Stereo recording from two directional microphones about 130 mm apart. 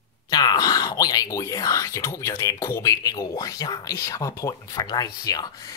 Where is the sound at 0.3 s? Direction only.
30° left (ahead or behind).